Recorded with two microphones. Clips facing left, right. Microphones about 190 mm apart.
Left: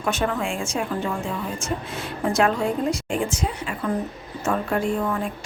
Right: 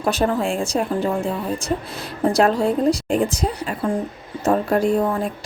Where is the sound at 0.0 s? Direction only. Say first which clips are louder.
Right 5 dB; 35° right (ahead or behind).